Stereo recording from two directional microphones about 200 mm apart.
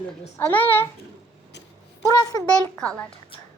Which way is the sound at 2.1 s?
20° left (ahead or behind).